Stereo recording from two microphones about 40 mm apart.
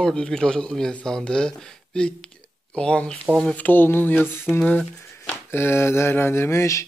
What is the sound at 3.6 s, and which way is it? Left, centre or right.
Speech, left.